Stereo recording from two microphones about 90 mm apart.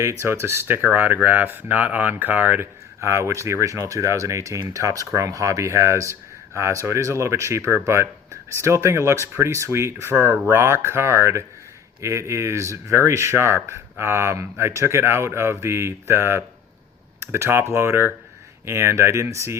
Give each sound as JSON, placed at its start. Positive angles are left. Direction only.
{"t": 0.0, "sound": "speech", "side_deg": -30}
{"t": 0.8, "sound": "speech", "side_deg": -15}
{"t": 3.0, "sound": "speech", "side_deg": -30}